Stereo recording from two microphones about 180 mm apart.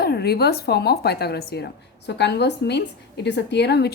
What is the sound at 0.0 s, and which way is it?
A woman's voice, 60° left (ahead or behind).